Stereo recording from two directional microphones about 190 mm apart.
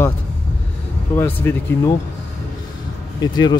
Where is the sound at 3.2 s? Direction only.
20° left (ahead or behind).